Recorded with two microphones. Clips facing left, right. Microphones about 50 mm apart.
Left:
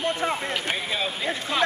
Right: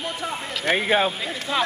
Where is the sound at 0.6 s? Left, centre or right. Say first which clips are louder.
Right 7 dB; right.